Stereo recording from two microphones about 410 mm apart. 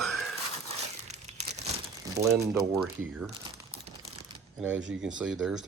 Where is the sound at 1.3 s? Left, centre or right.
Centre.